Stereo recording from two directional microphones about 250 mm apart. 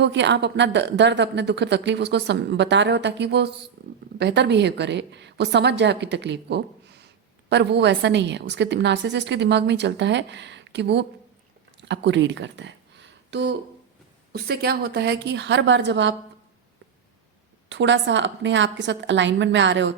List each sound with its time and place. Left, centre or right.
0.0 s speech: right
17.7 s speech: right